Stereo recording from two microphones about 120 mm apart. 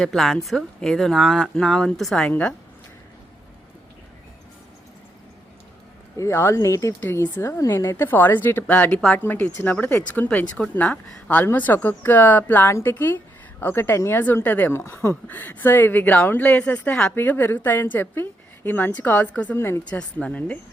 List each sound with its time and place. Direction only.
0.0 s speech: 5° left (ahead or behind)
6.1 s a woman's voice: 25° left (ahead or behind)
19.9 s a woman's voice: 10° left (ahead or behind)